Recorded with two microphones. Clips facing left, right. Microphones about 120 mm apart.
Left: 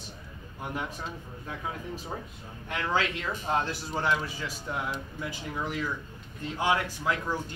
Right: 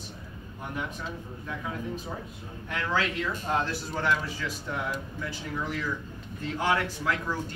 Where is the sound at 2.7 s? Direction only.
25° left (ahead or behind).